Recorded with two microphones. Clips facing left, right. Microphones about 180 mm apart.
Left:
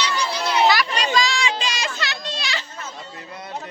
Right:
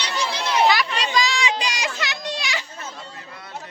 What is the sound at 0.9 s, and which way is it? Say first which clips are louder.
Children playing: left 1 dB; 20° right (ahead or behind).